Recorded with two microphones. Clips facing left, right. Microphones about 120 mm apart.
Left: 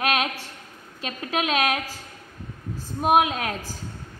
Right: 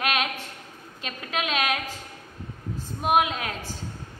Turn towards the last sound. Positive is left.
turn(degrees=45)  # may be behind; listen again after turning